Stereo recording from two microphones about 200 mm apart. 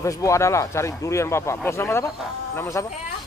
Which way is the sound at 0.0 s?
15° left (ahead or behind).